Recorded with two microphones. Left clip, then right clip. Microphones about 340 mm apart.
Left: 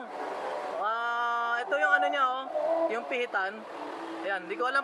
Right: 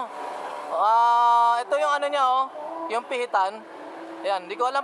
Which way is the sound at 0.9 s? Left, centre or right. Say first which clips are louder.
Right 15 dB; centre.